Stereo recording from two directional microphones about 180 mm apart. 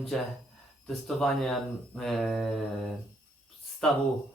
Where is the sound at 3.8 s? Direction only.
5° left (ahead or behind).